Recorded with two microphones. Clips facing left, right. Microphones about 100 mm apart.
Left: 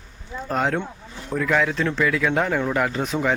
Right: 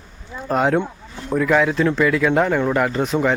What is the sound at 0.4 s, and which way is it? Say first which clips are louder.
Speech: right 5 dB; 10° right (ahead or behind).